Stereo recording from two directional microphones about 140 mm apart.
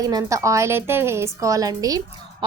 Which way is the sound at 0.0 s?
25° right (ahead or behind).